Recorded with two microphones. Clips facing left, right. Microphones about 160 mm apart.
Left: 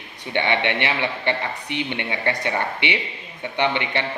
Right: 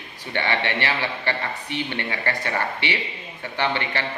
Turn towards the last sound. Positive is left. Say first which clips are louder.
# left 3 dB
turn(degrees=20)  # may be behind; listen again after turning